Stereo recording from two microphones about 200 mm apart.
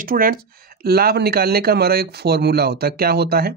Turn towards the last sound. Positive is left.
turn(degrees=-50)  # may be behind; listen again after turning